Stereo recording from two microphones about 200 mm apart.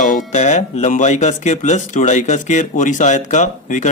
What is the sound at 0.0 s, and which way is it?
A man's voice, 40° left (ahead or behind).